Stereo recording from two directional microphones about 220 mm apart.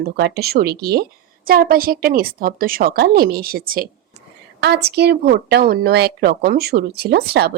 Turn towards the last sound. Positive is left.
turn(degrees=-45)  # may be behind; listen again after turning